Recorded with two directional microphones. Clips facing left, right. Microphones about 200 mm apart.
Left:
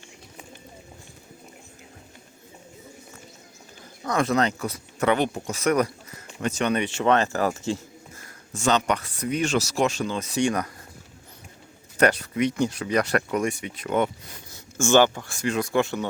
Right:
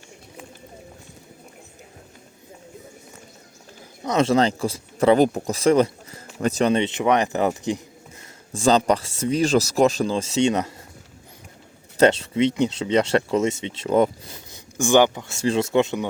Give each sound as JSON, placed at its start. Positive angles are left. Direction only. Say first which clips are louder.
{"t": 4.0, "sound": "a man's voice", "louder": "right 4 dB", "side_deg": -25}
{"t": 8.2, "sound": "speech", "louder": "right 5 dB", "side_deg": -30}
{"t": 11.9, "sound": "a man's voice", "louder": "right 4 dB", "side_deg": -25}
{"t": 14.8, "sound": "a man's voice", "louder": "right 2 dB", "side_deg": -15}